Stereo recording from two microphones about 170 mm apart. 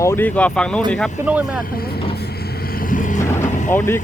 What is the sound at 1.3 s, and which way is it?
Speech, 10° right (ahead or behind).